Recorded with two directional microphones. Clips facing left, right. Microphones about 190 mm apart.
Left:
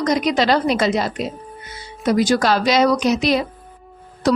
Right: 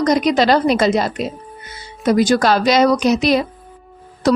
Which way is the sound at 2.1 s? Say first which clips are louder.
Right 2 dB; 50° right (ahead or behind).